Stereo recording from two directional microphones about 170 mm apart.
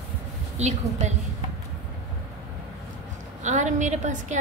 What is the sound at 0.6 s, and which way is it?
Speech, 40° right (ahead or behind).